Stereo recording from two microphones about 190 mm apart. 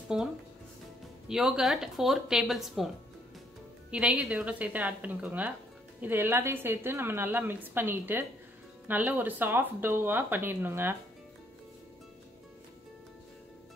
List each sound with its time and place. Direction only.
0.1 s speech: 5° right (ahead or behind)
1.3 s speech: centre (ahead or behind)
3.9 s a woman's voice: 5° right (ahead or behind)